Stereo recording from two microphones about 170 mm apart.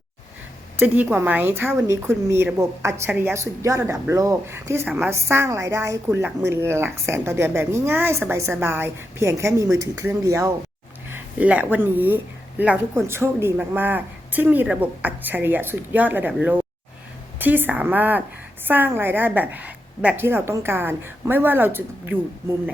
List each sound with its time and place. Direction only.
0.8 s a woman's voice: 10° right (ahead or behind)